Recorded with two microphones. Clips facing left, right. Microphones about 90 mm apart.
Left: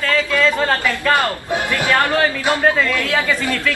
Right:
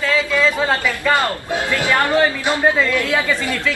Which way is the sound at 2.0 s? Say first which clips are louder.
Right 1 dB; 20° right (ahead or behind).